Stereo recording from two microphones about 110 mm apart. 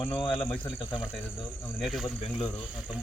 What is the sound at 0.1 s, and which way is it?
Speech, 50° left (ahead or behind).